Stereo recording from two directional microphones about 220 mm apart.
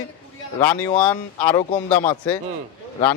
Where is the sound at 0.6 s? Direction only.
10° left (ahead or behind).